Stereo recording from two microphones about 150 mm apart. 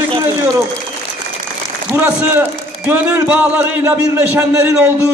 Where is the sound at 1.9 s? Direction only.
15° right (ahead or behind).